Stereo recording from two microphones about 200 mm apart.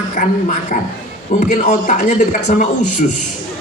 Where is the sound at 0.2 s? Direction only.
40° left (ahead or behind).